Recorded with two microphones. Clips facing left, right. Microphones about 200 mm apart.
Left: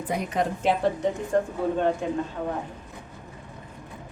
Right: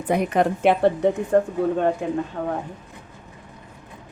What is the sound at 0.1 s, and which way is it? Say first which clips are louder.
Speech: right 7 dB; 60° right (ahead or behind).